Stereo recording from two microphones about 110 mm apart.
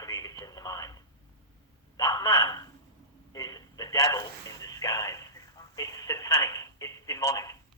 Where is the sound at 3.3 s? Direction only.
35° left (ahead or behind).